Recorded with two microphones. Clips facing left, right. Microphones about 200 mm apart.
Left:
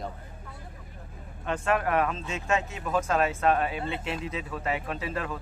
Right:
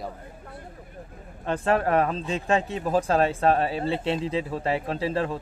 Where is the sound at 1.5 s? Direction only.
35° right (ahead or behind).